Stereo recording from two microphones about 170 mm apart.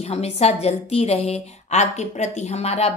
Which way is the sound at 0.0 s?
40° left (ahead or behind).